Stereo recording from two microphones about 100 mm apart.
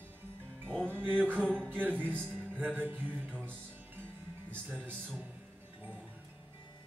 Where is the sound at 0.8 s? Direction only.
20° right (ahead or behind).